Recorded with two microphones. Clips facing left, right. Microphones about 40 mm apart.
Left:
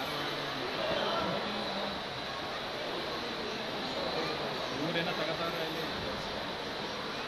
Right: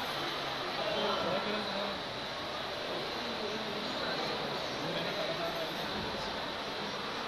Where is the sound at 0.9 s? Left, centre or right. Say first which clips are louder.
Right 1 dB; left.